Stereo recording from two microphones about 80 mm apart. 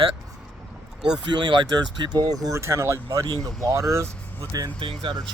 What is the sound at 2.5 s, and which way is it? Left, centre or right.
Speech, right.